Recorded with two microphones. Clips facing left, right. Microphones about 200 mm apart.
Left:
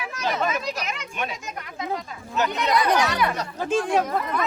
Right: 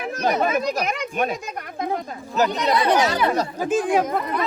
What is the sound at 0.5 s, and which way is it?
Speech, 50° right (ahead or behind).